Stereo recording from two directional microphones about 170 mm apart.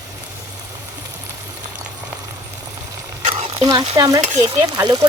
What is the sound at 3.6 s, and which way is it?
Stir, 20° right (ahead or behind).